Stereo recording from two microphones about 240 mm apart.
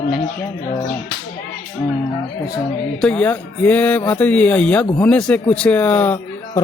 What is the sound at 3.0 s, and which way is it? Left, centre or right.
A man's voice, centre.